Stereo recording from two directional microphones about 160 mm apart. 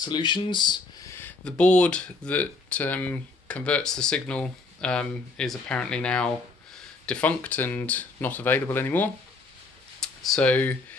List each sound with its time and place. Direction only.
0.0 s speech: 25° left (ahead or behind)
1.4 s speech: 5° left (ahead or behind)